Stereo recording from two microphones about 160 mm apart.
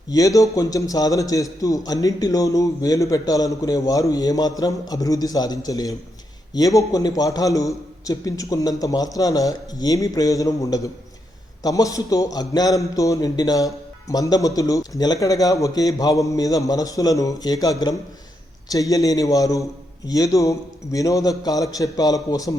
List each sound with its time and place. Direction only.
0.1 s a man's voice: 20° left (ahead or behind)